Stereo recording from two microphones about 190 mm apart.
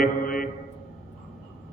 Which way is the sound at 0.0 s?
50° left (ahead or behind).